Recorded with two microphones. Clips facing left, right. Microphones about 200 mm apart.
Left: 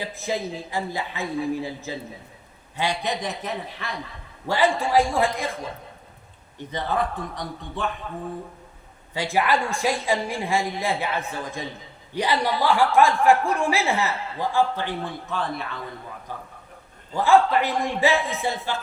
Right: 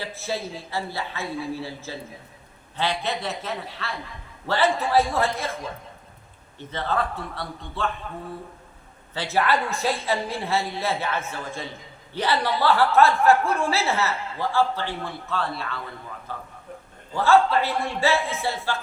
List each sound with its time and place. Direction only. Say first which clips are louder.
0.0 s speech: left 2 dB; 15° left (ahead or behind)
6.6 s speech: left 1 dB; 15° left (ahead or behind)
9.1 s speech: left 1 dB; 15° left (ahead or behind)